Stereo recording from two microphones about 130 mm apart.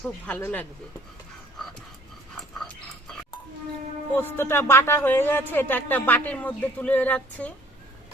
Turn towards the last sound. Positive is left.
turn(degrees=10)  # may be behind; listen again after turning